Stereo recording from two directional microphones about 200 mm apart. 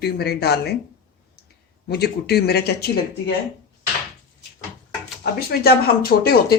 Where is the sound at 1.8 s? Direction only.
55° left (ahead or behind).